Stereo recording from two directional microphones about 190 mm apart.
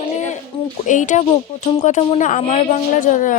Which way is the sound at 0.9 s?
40° left (ahead or behind).